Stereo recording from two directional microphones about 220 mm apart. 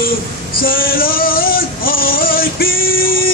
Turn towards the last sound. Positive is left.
turn(degrees=40)  # may be behind; listen again after turning